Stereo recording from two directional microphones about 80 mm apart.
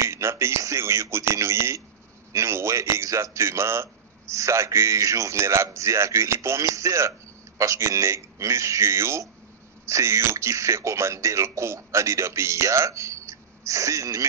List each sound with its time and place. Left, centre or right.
0.0 s a man's voice: right